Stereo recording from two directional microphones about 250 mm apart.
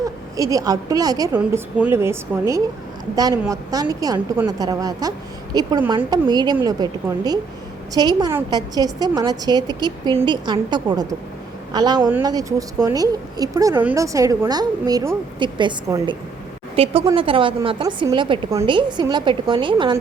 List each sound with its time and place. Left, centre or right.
0.0 s a woman's voice: centre
3.2 s a woman's voice: centre